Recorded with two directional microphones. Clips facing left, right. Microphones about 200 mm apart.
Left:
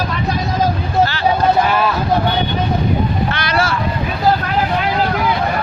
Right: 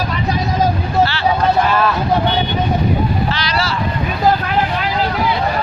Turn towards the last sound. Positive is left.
turn(degrees=50)  # may be behind; listen again after turning